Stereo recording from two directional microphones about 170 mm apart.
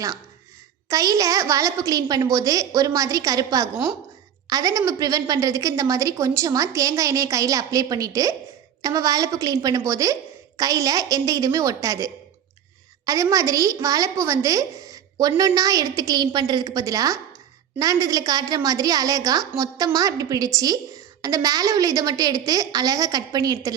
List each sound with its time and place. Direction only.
0.9 s a woman's voice: 20° right (ahead or behind)